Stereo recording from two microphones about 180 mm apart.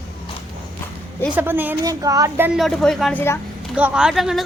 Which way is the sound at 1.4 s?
10° right (ahead or behind).